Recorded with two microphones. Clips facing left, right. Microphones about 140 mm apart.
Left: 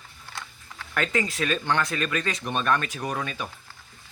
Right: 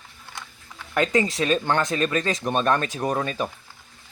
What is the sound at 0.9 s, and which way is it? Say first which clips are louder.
Speech: right 5 dB; 20° right (ahead or behind).